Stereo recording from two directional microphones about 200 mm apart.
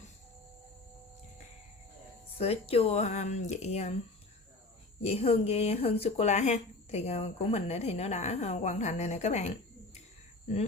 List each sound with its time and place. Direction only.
2.4 s speech: 30° left (ahead or behind)
5.0 s speech: 30° left (ahead or behind)